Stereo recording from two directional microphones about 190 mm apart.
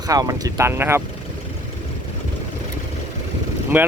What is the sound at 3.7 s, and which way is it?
Speech, 10° right (ahead or behind).